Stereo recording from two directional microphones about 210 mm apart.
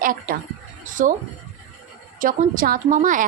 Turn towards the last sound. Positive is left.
turn(degrees=-40)  # may be behind; listen again after turning